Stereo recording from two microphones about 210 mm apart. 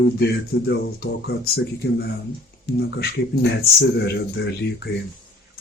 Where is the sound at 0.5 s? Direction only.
55° left (ahead or behind).